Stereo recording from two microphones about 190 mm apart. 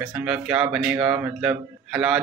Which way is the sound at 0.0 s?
5° right (ahead or behind).